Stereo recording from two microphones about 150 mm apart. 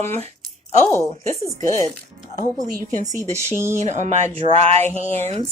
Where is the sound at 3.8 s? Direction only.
50° right (ahead or behind).